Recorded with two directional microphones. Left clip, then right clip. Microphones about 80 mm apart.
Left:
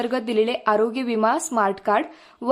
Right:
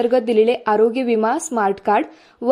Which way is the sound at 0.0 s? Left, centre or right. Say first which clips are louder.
Right 7 dB; right.